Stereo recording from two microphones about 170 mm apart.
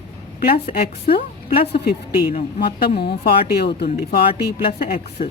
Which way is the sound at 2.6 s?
65° left (ahead or behind).